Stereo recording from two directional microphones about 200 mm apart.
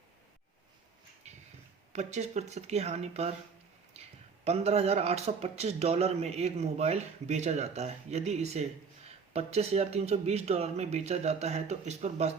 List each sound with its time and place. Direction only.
1.2 s a sound: 35° right (ahead or behind)
1.9 s speech: 35° right (ahead or behind)
4.4 s speech: 30° right (ahead or behind)